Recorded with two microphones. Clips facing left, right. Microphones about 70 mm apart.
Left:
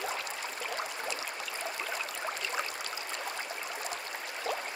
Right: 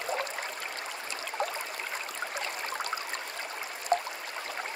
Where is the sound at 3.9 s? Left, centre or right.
Right.